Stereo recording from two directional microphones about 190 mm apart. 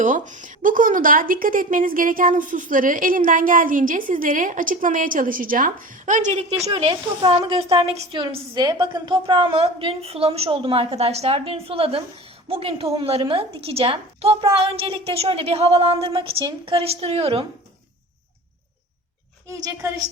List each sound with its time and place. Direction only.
0.0 s speech: 40° right (ahead or behind)
6.7 s a woman's voice: 25° right (ahead or behind)
19.5 s a woman's voice: 20° right (ahead or behind)